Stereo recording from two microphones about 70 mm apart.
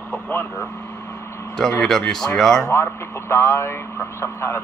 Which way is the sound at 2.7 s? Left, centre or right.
Left.